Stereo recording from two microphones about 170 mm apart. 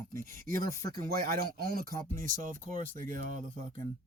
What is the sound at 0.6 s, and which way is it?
Speech, 20° left (ahead or behind).